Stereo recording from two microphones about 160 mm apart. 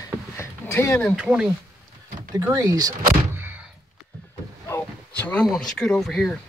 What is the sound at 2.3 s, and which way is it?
Speech, 25° right (ahead or behind).